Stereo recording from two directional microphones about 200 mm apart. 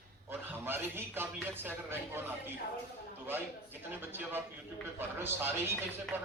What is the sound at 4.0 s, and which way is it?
Speech, 10° right (ahead or behind).